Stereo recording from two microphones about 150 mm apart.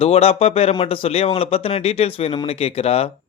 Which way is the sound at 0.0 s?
40° left (ahead or behind).